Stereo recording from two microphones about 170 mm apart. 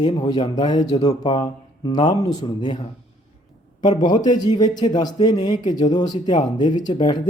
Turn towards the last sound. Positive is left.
turn(degrees=25)  # may be behind; listen again after turning